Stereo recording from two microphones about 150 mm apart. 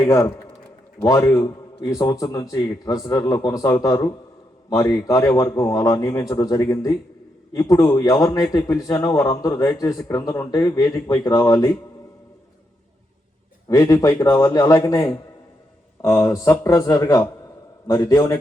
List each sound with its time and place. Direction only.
0.0 s a man's voice: 20° left (ahead or behind)
13.7 s a man's voice: 20° left (ahead or behind)
16.2 s a man's voice: 20° left (ahead or behind)